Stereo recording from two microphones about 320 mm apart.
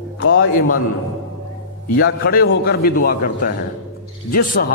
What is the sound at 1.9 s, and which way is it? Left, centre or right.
A man's voice, left.